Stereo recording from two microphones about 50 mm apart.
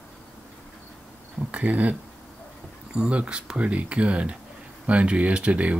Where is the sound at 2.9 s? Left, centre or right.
Centre.